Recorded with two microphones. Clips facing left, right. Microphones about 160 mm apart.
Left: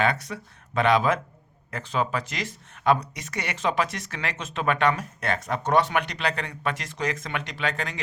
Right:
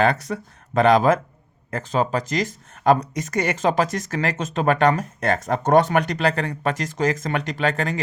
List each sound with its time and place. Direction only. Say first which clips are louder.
0.0 s speech: right 5 dB; 45° right (ahead or behind)